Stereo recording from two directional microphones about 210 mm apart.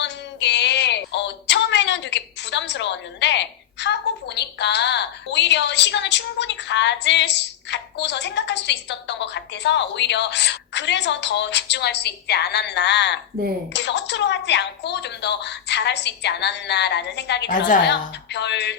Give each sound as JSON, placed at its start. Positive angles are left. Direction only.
{"t": 0.0, "sound": "child singing", "side_deg": 55}
{"t": 13.7, "sound": "a woman's voice", "side_deg": 55}